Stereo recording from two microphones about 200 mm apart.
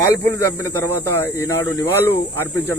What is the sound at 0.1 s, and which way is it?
Speech, 15° left (ahead or behind).